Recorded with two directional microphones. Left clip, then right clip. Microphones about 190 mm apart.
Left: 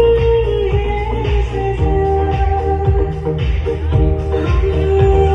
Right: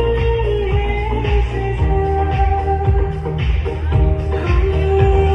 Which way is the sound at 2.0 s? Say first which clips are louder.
Left 1 dB; 40° right (ahead or behind).